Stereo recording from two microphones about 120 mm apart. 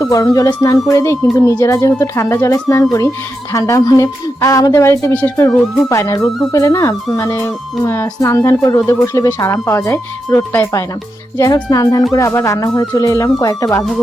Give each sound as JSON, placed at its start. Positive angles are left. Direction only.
{"t": 0.0, "sound": "speech", "side_deg": 30}